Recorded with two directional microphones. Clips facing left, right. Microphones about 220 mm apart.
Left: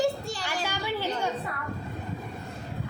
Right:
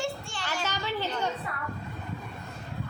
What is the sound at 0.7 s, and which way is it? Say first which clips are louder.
Speech: left 2 dB; 10° left (ahead or behind).